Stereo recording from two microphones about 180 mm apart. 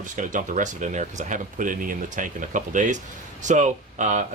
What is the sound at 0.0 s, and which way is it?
Speech, 45° right (ahead or behind).